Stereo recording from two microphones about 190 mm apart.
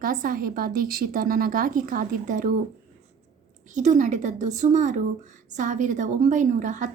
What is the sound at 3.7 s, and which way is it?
A woman's voice, 40° right (ahead or behind).